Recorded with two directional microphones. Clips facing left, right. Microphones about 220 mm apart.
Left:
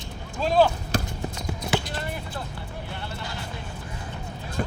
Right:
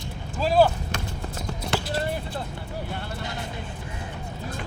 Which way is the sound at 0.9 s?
35° left (ahead or behind).